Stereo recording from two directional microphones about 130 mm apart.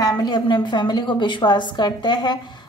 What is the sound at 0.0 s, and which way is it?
A woman's voice, 35° left (ahead or behind).